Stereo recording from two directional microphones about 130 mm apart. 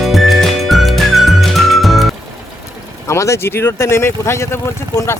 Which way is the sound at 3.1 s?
20° left (ahead or behind).